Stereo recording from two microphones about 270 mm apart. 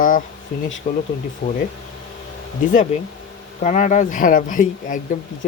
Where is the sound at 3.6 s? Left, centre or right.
Left.